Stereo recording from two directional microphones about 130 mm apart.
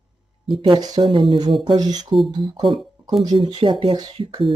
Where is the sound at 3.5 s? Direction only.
45° right (ahead or behind).